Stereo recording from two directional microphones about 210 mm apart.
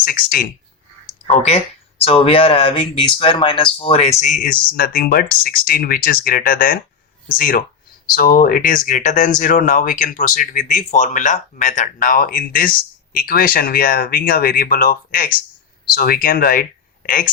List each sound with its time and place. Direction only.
0.0 s speech: 45° left (ahead or behind)
1.3 s speech: 30° left (ahead or behind)